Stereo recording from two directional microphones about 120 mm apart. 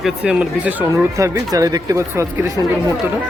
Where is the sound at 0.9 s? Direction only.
25° right (ahead or behind).